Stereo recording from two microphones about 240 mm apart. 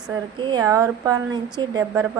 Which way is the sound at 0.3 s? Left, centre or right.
Centre.